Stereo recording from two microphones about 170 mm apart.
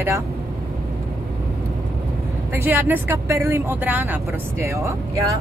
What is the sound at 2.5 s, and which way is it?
Speech, 10° right (ahead or behind).